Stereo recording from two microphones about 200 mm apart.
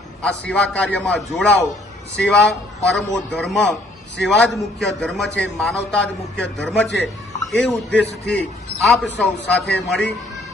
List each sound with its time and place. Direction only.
0.2 s a man's voice: 5° left (ahead or behind)
6.8 s a man's voice: 60° left (ahead or behind)
7.5 s a man's voice: 5° left (ahead or behind)